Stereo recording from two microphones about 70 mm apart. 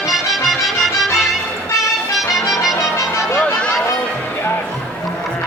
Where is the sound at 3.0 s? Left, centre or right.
Left.